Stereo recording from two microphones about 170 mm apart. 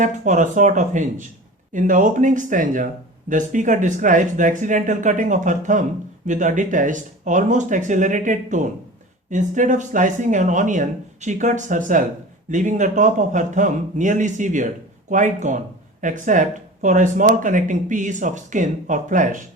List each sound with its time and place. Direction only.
0.0 s speech: 45° right (ahead or behind)